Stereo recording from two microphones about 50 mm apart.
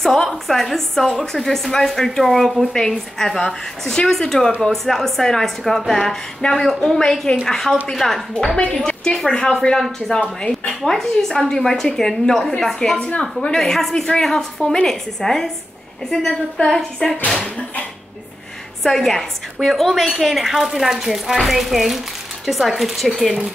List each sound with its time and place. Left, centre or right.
0.0 s a woman's voice: centre
7.0 s a woman's voice: centre
17.4 s a sound: left
18.8 s a woman's voice: centre